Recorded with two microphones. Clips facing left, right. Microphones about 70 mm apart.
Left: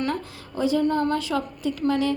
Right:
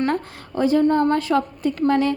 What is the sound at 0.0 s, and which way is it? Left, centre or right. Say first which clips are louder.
A woman's voice: right 5 dB; right.